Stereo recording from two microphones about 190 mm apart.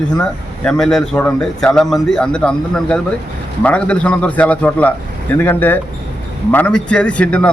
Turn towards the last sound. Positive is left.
turn(degrees=5)  # may be behind; listen again after turning